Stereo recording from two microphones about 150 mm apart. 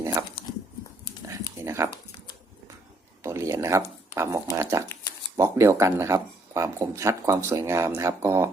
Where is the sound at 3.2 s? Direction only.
20° right (ahead or behind).